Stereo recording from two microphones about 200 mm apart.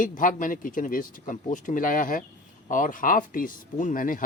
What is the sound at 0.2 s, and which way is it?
Speech, 40° left (ahead or behind).